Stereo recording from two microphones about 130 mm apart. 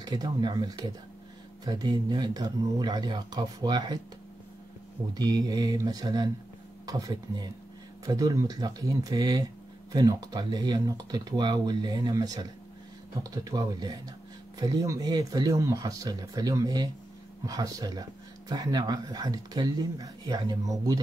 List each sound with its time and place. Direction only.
0.0 s speech: 30° right (ahead or behind)
5.1 s speech: 30° right (ahead or behind)